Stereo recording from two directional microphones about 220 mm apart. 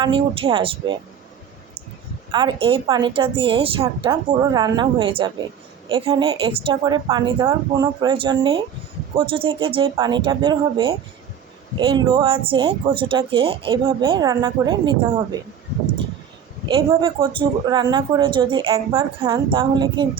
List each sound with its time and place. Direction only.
0.0 s speech: 25° right (ahead or behind)
2.3 s speech: 20° right (ahead or behind)
16.6 s speech: 20° right (ahead or behind)